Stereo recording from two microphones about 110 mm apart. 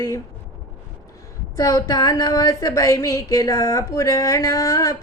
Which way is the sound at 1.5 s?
30° left (ahead or behind).